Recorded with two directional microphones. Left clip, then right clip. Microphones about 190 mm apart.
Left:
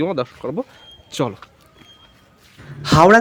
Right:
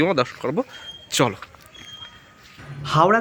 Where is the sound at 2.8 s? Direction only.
20° left (ahead or behind).